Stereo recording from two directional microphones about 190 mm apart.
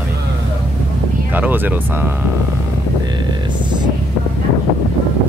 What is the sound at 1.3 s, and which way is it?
Speech, 10° right (ahead or behind).